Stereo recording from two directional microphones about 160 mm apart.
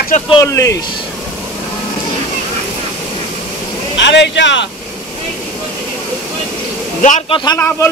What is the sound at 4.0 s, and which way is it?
Speech, 90° left.